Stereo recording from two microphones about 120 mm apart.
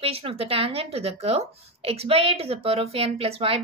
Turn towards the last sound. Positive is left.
turn(degrees=-55)  # may be behind; listen again after turning